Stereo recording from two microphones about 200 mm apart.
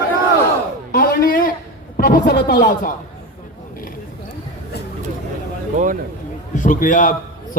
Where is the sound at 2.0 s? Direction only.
55° left (ahead or behind).